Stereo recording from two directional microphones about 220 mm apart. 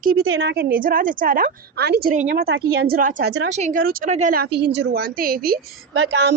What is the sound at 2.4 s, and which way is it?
A woman's voice, 50° right (ahead or behind).